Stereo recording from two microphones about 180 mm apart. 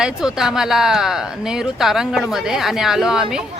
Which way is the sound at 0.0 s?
5° right (ahead or behind).